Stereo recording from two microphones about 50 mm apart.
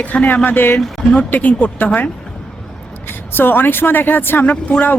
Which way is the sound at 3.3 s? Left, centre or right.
Left.